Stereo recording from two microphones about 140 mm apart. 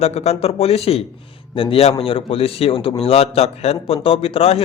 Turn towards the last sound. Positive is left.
turn(degrees=45)  # may be behind; listen again after turning